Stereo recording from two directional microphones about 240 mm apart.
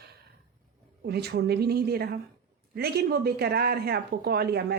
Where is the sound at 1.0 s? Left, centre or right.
Right.